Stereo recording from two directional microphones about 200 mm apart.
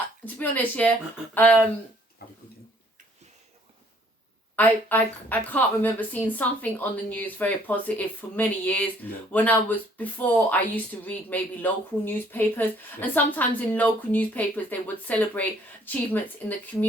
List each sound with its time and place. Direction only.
0.3 s speech: 5° left (ahead or behind)
2.2 s a sound: 50° left (ahead or behind)
4.5 s speech: 10° left (ahead or behind)